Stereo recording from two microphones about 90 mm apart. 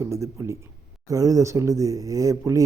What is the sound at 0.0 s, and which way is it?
A man's voice, 35° right (ahead or behind).